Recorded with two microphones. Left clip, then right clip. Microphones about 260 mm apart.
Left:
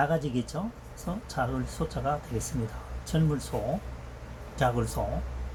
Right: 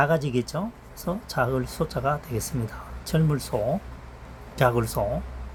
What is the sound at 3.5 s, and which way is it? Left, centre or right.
Speech, right.